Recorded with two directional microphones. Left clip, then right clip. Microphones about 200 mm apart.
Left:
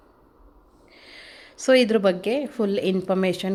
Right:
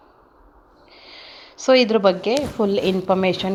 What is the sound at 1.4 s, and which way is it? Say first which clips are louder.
A woman's voice: right 3 dB; 15° left (ahead or behind).